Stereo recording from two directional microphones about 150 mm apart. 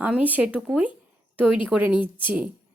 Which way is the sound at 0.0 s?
10° right (ahead or behind).